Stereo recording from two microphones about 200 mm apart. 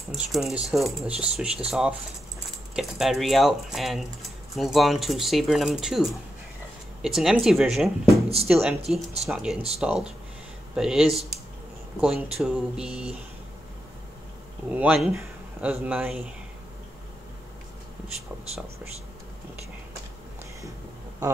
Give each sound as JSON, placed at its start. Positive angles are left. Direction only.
{"t": 0.1, "sound": "speech", "side_deg": 0}
{"t": 14.7, "sound": "speech", "side_deg": -5}
{"t": 18.0, "sound": "speech", "side_deg": -30}